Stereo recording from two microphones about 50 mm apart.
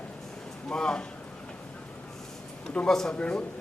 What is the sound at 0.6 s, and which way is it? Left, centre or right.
Speech, centre.